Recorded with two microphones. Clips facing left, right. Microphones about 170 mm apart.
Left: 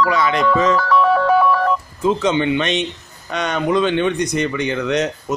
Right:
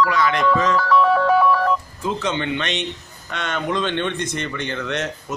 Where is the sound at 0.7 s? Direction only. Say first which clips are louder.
Left 1 dB; 55° left (ahead or behind).